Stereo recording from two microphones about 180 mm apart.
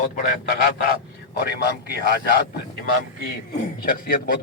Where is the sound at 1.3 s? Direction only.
60° left (ahead or behind).